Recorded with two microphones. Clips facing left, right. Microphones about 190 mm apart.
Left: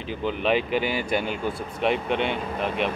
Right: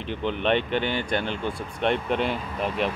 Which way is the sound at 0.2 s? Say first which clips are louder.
Left 1 dB; 5° left (ahead or behind).